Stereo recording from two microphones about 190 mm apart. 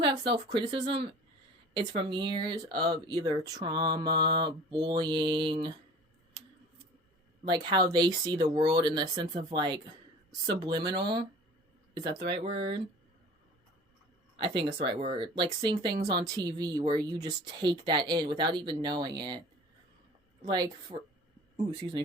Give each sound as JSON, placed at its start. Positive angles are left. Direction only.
{"t": 0.0, "sound": "speech", "side_deg": -25}
{"t": 7.4, "sound": "speech", "side_deg": -25}
{"t": 12.3, "sound": "speech", "side_deg": -25}
{"t": 14.3, "sound": "speech", "side_deg": -25}
{"t": 20.4, "sound": "speech", "side_deg": -20}